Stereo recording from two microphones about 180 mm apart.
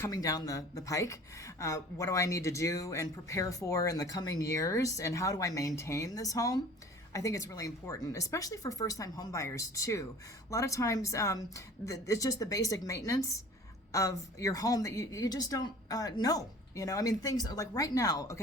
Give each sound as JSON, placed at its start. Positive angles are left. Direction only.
{"t": 0.0, "sound": "a woman's voice", "side_deg": 20}